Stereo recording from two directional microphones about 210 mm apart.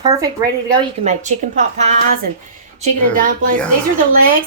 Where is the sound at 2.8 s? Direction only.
40° right (ahead or behind).